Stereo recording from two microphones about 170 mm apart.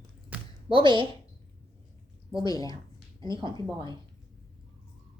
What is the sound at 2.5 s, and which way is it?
Speech, 20° left (ahead or behind).